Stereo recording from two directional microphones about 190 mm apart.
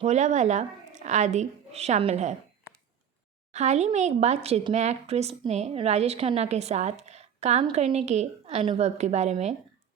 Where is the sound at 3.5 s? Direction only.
35° right (ahead or behind).